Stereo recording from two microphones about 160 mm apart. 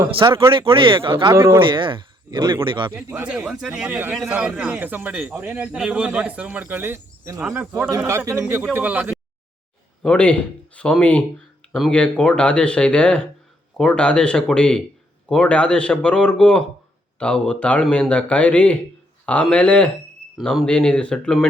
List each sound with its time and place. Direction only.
0.1 s speech: 35° right (ahead or behind)
1.3 s a man's voice: 15° right (ahead or behind)
1.6 s speech: 30° right (ahead or behind)
2.9 s a man's voice: 10° right (ahead or behind)
10.0 s speech: 5° left (ahead or behind)